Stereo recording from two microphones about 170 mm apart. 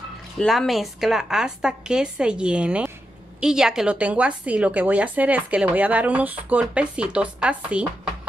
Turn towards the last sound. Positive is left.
turn(degrees=-5)  # may be behind; listen again after turning